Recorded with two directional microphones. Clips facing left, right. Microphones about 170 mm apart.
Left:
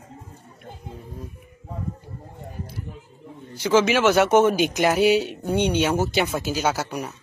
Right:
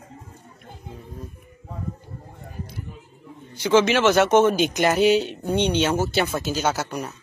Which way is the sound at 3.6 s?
5° left (ahead or behind).